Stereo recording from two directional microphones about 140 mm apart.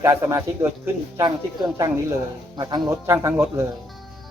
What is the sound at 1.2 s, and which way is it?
A man's voice, 30° right (ahead or behind).